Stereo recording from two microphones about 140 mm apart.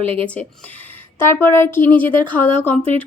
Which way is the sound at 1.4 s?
15° left (ahead or behind).